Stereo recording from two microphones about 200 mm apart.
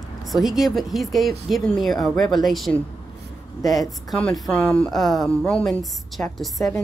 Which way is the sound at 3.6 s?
20° left (ahead or behind).